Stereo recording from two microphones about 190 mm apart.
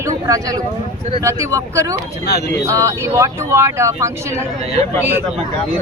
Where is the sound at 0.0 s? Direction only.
15° right (ahead or behind).